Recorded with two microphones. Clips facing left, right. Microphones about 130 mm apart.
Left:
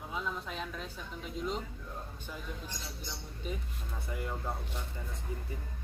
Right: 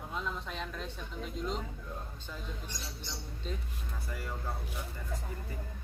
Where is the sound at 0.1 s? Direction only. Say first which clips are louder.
Left 1 dB; 5° left (ahead or behind).